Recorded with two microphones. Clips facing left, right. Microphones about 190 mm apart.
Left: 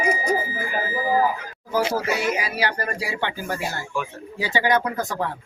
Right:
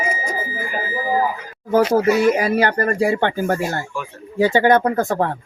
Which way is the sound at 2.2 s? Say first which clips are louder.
Right 8 dB; 50° right (ahead or behind).